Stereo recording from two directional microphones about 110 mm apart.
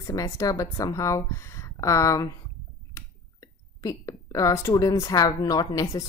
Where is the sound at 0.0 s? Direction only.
30° left (ahead or behind).